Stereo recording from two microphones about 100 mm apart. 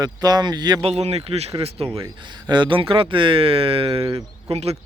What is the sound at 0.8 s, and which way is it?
Speech, 85° right.